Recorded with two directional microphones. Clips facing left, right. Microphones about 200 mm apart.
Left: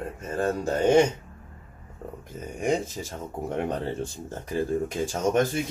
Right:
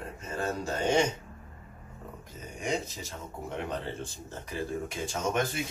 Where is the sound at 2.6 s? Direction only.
50° left (ahead or behind).